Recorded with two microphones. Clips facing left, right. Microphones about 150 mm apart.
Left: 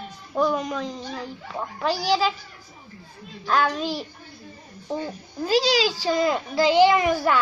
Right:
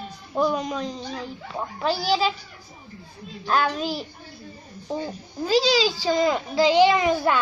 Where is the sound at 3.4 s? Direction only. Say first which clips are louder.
Even; 20° right (ahead or behind).